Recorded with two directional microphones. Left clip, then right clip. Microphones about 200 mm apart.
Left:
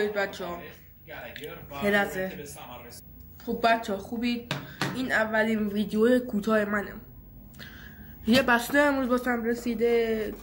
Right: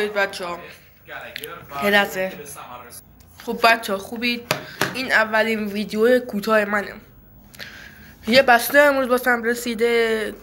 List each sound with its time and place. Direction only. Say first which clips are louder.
0.0 s a man's voice: right 6 dB; 20° left (ahead or behind)
1.8 s speech: right 7 dB; 15° left (ahead or behind)
3.4 s a man's voice: right 7 dB; 10° left (ahead or behind)